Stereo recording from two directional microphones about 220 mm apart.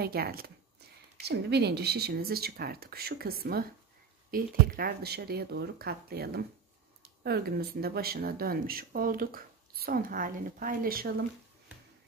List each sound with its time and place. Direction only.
0.0 s speech: 45° right (ahead or behind)